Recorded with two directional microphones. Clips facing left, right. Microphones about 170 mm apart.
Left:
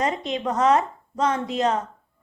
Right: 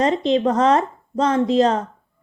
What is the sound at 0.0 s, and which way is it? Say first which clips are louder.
Speech: right 8 dB; 30° right (ahead or behind).